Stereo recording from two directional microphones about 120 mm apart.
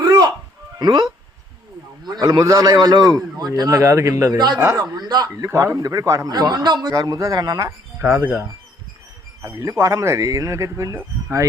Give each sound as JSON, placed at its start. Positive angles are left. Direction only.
{"t": 0.0, "sound": "music", "side_deg": -35}
{"t": 0.8, "sound": "a man's voice", "side_deg": -35}
{"t": 2.0, "sound": "a man's voice", "side_deg": -35}
{"t": 4.6, "sound": "a man's voice", "side_deg": -25}
{"t": 4.9, "sound": "a man's voice", "side_deg": -35}
{"t": 7.9, "sound": "speech", "side_deg": -15}
{"t": 9.4, "sound": "a man's voice", "side_deg": -30}